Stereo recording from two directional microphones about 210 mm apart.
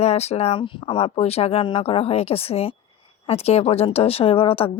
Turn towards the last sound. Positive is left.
turn(degrees=25)  # may be behind; listen again after turning